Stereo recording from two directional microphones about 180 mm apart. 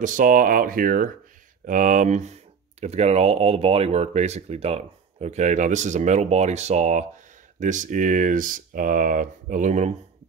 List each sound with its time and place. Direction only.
0.0 s speech: 45° right (ahead or behind)